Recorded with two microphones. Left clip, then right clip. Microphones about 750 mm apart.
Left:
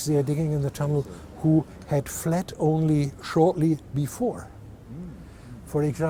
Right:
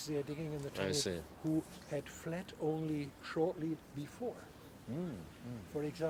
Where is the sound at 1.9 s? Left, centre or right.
Left.